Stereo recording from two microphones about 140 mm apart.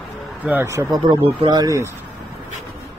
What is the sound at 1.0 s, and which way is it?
Speech, 40° right (ahead or behind).